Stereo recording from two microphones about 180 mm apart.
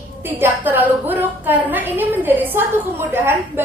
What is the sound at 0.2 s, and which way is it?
A woman's voice, 10° right (ahead or behind).